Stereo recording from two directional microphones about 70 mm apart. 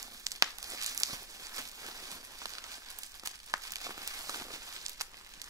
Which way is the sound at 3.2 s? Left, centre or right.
Right.